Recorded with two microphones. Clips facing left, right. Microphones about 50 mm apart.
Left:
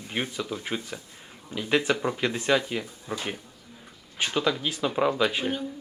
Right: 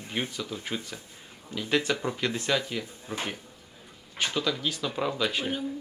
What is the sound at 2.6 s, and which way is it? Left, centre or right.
Speech, left.